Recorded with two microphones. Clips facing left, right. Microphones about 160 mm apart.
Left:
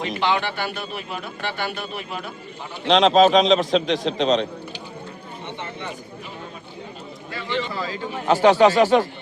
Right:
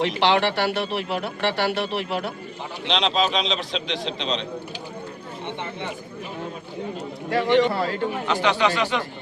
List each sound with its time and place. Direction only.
0.0 s speech: 75° right (ahead or behind)
2.8 s a man's voice: 45° left (ahead or behind)
7.3 s speech: 70° right (ahead or behind)
8.3 s speech: 40° left (ahead or behind)